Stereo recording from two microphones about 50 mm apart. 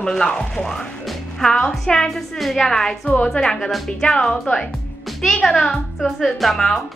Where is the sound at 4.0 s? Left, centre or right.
Centre.